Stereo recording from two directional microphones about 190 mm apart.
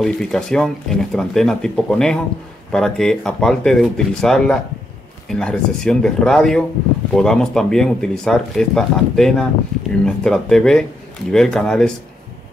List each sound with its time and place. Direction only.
0.0 s speech: 5° left (ahead or behind)